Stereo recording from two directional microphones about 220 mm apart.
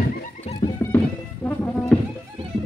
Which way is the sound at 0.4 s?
25° left (ahead or behind).